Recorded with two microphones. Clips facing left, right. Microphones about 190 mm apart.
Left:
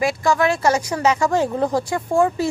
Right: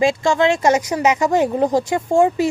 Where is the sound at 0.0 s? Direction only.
25° right (ahead or behind).